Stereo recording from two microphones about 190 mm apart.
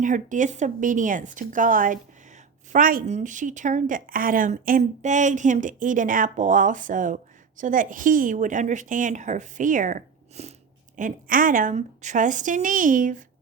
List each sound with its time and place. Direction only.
0.0 s a woman's voice: 40° right (ahead or behind)